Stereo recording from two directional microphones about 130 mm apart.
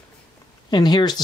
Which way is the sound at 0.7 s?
35° left (ahead or behind).